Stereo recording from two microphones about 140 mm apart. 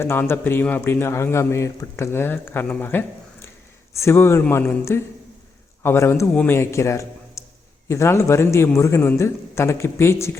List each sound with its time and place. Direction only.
0.0 s a man's voice: 15° left (ahead or behind)